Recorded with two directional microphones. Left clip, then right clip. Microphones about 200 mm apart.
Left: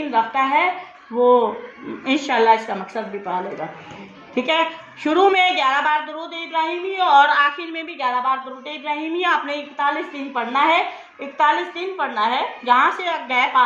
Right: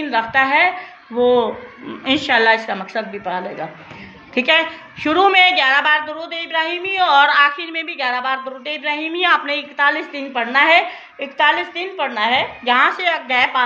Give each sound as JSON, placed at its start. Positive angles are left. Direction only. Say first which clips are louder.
{"t": 0.1, "sound": "a woman's voice", "louder": "right 2 dB", "side_deg": -20}